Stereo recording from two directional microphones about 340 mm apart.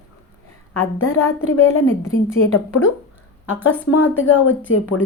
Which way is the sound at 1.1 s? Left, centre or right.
Left.